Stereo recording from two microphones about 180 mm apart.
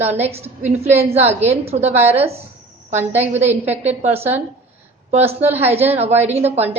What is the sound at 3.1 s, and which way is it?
A woman's voice, 35° right (ahead or behind).